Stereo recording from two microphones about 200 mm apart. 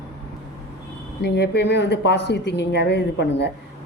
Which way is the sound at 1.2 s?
55° left (ahead or behind).